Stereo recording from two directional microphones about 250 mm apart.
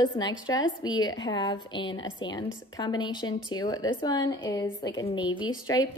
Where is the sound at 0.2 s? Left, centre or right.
Centre.